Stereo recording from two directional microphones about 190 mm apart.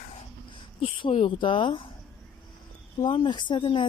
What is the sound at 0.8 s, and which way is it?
Speech, 30° left (ahead or behind).